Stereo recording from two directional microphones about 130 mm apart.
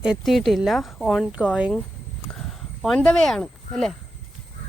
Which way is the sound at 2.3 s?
5° left (ahead or behind).